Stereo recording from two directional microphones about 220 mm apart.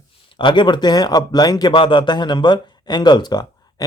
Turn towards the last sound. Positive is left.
turn(degrees=20)  # may be behind; listen again after turning